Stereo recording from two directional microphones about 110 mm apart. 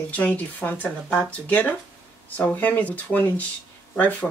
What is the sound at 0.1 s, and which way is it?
Speech, 15° left (ahead or behind).